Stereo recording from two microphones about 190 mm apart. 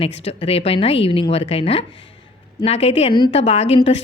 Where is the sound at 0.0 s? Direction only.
30° left (ahead or behind).